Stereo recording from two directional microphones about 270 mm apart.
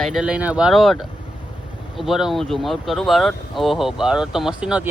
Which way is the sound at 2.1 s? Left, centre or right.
Centre.